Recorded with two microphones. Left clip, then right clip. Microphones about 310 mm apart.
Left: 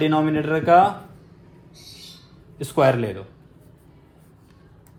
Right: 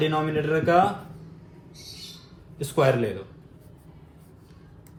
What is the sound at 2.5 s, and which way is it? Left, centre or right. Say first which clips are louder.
Speech: left 3 dB; left.